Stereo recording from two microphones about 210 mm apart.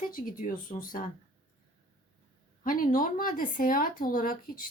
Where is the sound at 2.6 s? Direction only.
40° left (ahead or behind).